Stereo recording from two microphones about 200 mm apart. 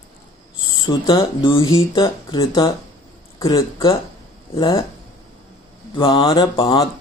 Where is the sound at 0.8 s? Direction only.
20° left (ahead or behind).